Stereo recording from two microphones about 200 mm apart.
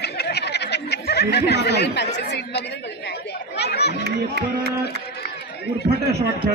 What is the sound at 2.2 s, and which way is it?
Chatter, 60° left (ahead or behind).